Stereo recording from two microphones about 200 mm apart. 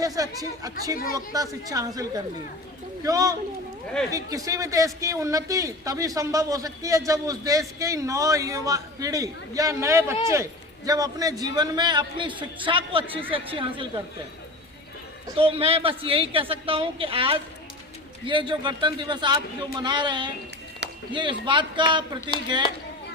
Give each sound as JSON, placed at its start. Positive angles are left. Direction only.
{"t": 0.0, "sound": "a man's voice", "side_deg": -15}
{"t": 15.4, "sound": "a man's voice", "side_deg": -30}